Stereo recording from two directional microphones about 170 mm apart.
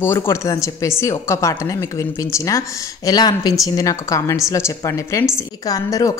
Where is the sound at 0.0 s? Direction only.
15° left (ahead or behind).